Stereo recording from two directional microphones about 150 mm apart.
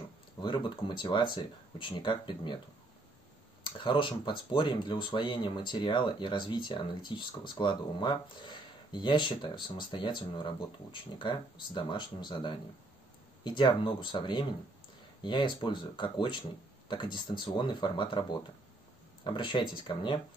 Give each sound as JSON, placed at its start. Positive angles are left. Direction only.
{"t": 0.4, "sound": "speech", "side_deg": 30}
{"t": 3.6, "sound": "speech", "side_deg": 30}